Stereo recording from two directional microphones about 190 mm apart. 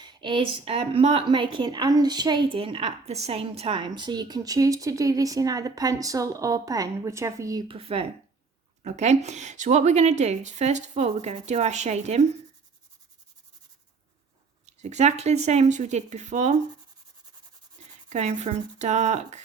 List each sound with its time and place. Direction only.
0.0 s a woman's voice: 25° right (ahead or behind)
7.7 s a woman's voice: 30° right (ahead or behind)
14.8 s a woman's voice: 35° right (ahead or behind)
18.1 s a woman's voice: 35° right (ahead or behind)